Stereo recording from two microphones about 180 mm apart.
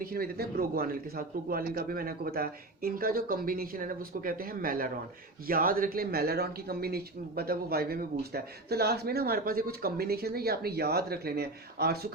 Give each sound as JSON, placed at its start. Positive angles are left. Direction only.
{"t": 0.0, "sound": "a man's voice", "side_deg": -55}